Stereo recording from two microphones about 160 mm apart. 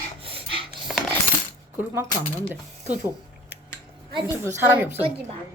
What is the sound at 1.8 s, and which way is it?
Speech, 15° right (ahead or behind).